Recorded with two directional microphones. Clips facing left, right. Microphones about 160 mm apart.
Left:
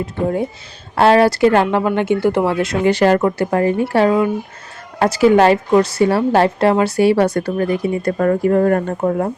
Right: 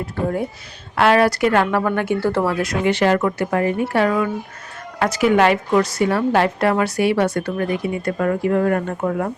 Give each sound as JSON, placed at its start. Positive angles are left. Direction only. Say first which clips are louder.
{"t": 0.0, "sound": "speech", "louder": "left 3 dB", "side_deg": 25}
{"t": 2.9, "sound": "a woman's voice", "louder": "left 3 dB", "side_deg": 40}